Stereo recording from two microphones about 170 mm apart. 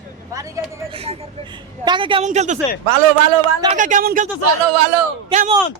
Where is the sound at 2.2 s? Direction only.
45° right (ahead or behind).